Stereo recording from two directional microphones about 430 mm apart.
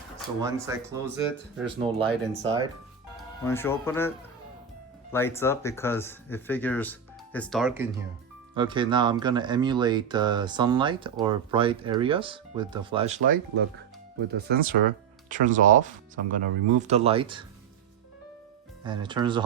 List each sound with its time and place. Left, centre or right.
0.4 s speech: centre
3.2 s speech: centre
5.1 s speech: centre
14.3 s speech: right
18.8 s speech: centre